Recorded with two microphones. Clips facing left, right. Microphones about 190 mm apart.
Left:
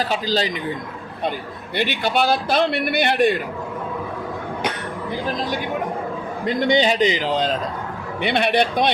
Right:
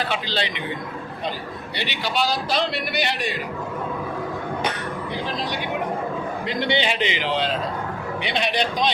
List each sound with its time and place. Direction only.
0.1 s a man's voice: 40° left (ahead or behind)
1.7 s a man's voice: 50° left (ahead or behind)
6.4 s a man's voice: 45° left (ahead or behind)
8.2 s a man's voice: 55° left (ahead or behind)